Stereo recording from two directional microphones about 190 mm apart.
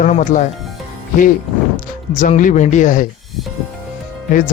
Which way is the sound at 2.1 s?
40° left (ahead or behind).